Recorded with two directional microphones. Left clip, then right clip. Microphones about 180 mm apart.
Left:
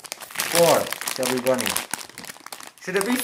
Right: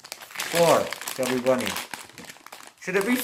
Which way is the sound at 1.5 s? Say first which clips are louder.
Left 3 dB; 40° left (ahead or behind).